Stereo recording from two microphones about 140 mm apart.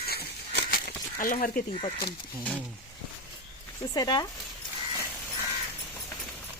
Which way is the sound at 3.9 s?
30° left (ahead or behind).